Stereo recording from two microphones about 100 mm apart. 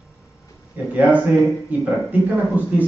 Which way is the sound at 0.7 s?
15° right (ahead or behind).